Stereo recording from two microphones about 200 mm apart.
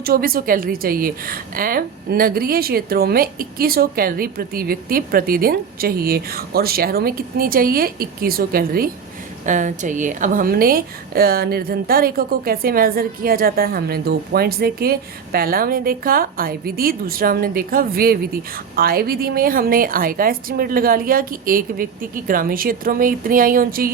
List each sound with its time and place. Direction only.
0.0 s a woman's voice: 45° right (ahead or behind)